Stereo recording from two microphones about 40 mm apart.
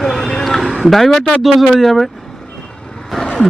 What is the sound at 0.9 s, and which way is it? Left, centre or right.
Speech, centre.